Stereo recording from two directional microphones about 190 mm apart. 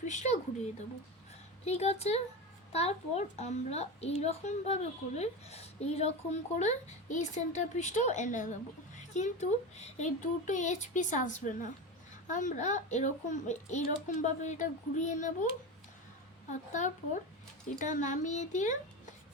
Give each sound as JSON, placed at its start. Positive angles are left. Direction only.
{"t": 0.0, "sound": "speech", "side_deg": 40}
{"t": 1.6, "sound": "speech", "side_deg": 35}